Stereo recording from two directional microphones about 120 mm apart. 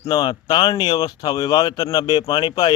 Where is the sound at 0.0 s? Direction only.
35° left (ahead or behind).